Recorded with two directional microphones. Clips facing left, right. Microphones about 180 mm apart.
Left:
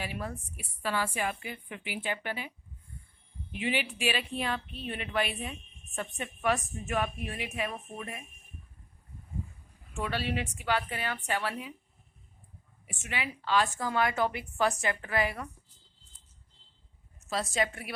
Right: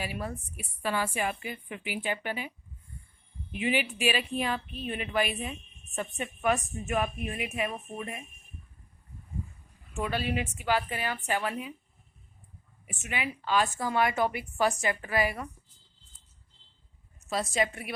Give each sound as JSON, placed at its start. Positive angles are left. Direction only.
{"t": 0.0, "sound": "a woman's voice", "side_deg": -10}
{"t": 3.6, "sound": "a woman's voice", "side_deg": -15}
{"t": 10.0, "sound": "a woman's voice", "side_deg": -15}
{"t": 12.9, "sound": "a woman's voice", "side_deg": -20}